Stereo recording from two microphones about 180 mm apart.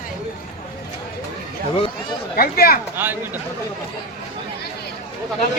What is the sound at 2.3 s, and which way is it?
Speech, 55° left (ahead or behind).